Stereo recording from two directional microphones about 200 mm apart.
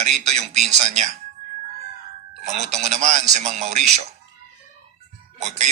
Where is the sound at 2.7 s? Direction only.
35° right (ahead or behind).